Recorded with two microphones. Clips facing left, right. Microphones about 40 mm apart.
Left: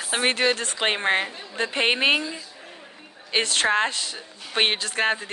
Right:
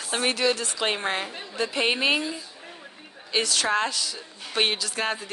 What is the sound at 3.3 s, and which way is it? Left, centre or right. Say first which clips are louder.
A woman's voice: left 2 dB; left.